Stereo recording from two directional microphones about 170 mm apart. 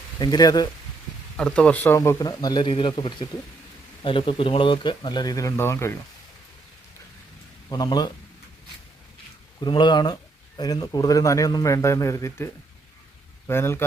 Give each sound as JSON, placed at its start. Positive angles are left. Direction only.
{"t": 0.2, "sound": "speech", "side_deg": 25}
{"t": 1.4, "sound": "speech", "side_deg": 5}
{"t": 2.0, "sound": "speech", "side_deg": 20}
{"t": 7.7, "sound": "speech", "side_deg": 25}
{"t": 9.6, "sound": "speech", "side_deg": 25}
{"t": 13.5, "sound": "speech", "side_deg": 15}